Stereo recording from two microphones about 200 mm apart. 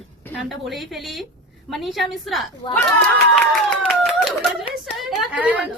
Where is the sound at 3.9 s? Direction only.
Centre (ahead or behind).